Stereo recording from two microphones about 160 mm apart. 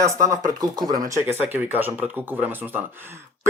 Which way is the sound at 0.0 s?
20° right (ahead or behind).